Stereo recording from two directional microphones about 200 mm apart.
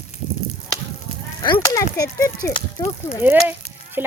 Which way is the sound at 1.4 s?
20° left (ahead or behind).